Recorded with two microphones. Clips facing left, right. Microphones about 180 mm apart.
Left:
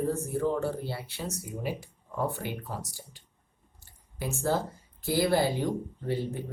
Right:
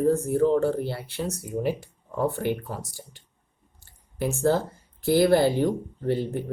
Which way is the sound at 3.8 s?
60° right (ahead or behind).